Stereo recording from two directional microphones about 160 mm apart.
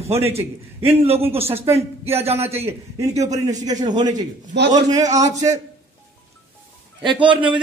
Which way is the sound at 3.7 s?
50° right (ahead or behind).